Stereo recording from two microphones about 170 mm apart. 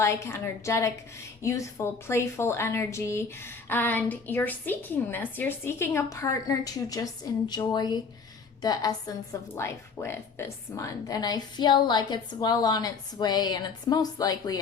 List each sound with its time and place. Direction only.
0.0 s a woman's voice: 15° left (ahead or behind)